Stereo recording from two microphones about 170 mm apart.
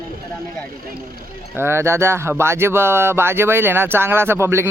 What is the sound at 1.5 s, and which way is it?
Speech, 15° right (ahead or behind).